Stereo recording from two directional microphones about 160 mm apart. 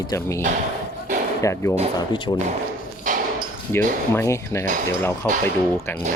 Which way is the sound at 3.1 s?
55° right (ahead or behind).